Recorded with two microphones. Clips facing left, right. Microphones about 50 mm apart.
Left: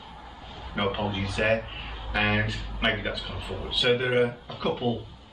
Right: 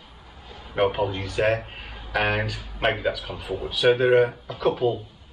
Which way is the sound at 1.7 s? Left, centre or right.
Centre.